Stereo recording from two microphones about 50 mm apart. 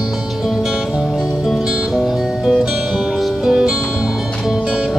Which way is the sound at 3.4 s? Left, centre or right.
Centre.